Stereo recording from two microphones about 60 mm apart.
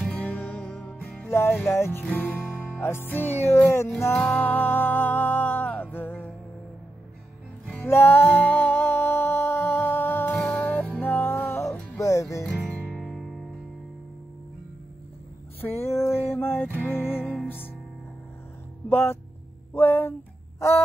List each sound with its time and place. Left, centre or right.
0.1 s music: left
0.6 s music: centre
0.9 s music: left
1.7 s music: left
2.1 s music: left
4.2 s music: left
7.8 s music: left
10.4 s music: left
12.0 s music: left
12.7 s music: centre
13.0 s music: centre
15.6 s music: left
18.9 s speech: left
20.5 s a sound: left